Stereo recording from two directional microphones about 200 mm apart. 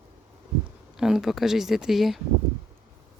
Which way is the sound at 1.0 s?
Centre (ahead or behind).